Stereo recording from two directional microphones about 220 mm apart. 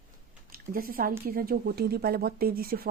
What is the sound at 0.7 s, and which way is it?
A woman's voice, 40° right (ahead or behind).